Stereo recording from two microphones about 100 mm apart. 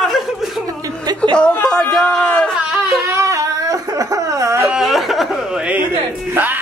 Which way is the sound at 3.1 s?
30° right (ahead or behind).